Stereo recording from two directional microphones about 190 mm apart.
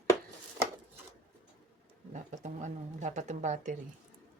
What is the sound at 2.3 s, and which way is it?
Speech, 40° right (ahead or behind).